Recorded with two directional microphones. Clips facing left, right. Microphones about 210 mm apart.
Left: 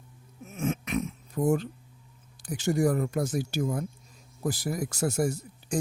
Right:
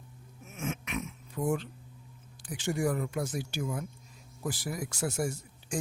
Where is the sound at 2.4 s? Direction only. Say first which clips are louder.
Left 5 dB; 40° left (ahead or behind).